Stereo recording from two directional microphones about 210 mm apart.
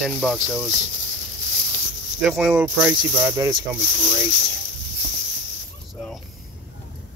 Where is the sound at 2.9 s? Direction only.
15° right (ahead or behind).